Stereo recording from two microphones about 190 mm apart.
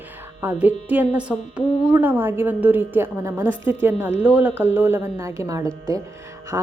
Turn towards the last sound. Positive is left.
turn(degrees=-15)  # may be behind; listen again after turning